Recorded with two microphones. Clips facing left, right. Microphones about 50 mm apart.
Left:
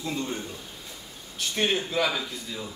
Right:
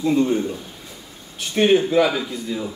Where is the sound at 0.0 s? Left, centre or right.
Right.